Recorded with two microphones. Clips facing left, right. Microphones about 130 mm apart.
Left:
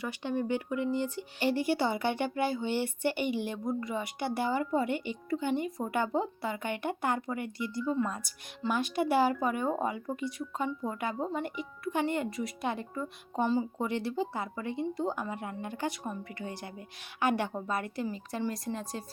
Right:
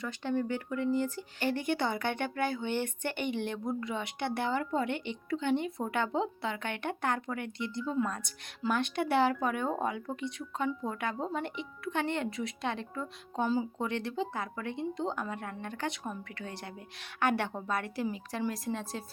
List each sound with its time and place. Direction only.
0.0 s speech: 15° left (ahead or behind)
16.5 s speech: 60° right (ahead or behind)
16.7 s speech: centre (ahead or behind)